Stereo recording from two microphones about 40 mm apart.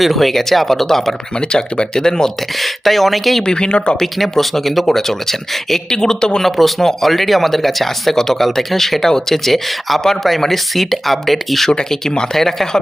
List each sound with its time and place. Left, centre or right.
0.0 s speech: centre
2.6 s speech: centre
3.4 s speech: left
4.0 s speech: centre
6.6 s speech: centre
11.7 s speech: centre